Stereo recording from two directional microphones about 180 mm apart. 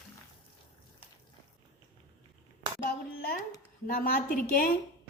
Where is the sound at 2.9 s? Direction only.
50° left (ahead or behind).